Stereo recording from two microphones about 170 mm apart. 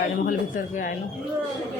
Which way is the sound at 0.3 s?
50° left (ahead or behind).